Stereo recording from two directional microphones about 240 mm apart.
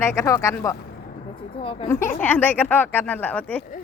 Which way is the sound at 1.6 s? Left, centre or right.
Left.